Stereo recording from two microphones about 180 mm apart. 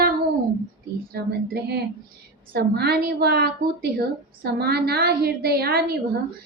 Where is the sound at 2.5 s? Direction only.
65° right (ahead or behind).